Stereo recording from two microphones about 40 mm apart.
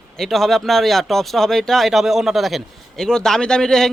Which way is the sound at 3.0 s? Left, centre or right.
Centre.